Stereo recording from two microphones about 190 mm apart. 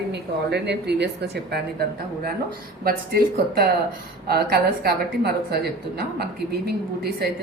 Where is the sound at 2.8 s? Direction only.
50° right (ahead or behind).